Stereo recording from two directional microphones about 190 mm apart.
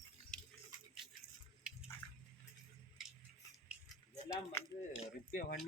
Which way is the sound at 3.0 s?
Centre (ahead or behind).